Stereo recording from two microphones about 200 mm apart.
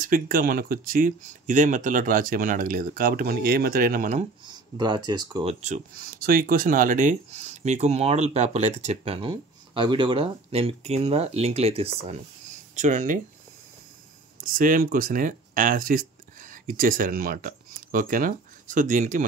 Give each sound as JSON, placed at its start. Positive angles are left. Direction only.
{"t": 0.0, "sound": "speech", "side_deg": -45}
{"t": 4.5, "sound": "speech", "side_deg": -20}
{"t": 14.4, "sound": "speech", "side_deg": -45}